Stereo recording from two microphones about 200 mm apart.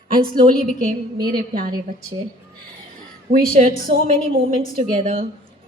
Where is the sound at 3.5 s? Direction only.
45° right (ahead or behind).